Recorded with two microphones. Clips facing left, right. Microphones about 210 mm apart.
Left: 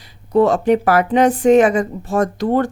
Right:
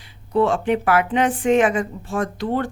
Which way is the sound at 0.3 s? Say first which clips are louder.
Left 5 dB; 40° left (ahead or behind).